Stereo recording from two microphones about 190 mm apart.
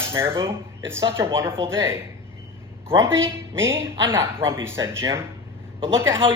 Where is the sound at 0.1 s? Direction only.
15° right (ahead or behind).